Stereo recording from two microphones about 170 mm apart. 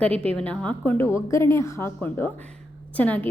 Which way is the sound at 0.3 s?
5° left (ahead or behind).